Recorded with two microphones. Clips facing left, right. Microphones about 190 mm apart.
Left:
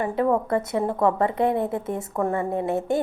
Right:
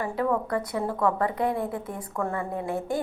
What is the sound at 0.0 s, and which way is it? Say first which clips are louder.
Speech: left 4 dB; 25° left (ahead or behind).